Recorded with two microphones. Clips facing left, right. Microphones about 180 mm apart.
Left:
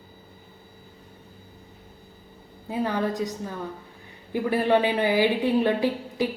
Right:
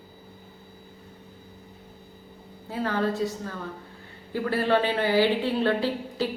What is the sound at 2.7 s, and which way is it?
A woman's voice, 15° left (ahead or behind).